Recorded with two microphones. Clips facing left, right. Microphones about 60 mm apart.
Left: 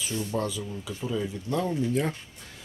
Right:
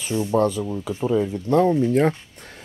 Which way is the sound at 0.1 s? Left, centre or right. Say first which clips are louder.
Right 10 dB; right.